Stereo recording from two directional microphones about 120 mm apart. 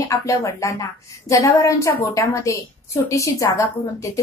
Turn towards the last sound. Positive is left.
turn(degrees=25)  # may be behind; listen again after turning